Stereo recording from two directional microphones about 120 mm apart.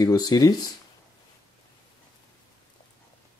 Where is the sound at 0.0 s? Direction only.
30° left (ahead or behind).